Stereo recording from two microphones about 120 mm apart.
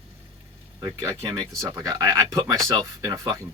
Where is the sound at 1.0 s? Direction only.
30° right (ahead or behind).